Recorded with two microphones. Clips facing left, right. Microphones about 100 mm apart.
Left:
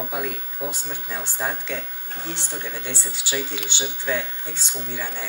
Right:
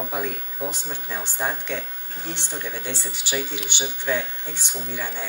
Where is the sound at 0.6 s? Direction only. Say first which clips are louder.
Right 1 dB; 20° left (ahead or behind).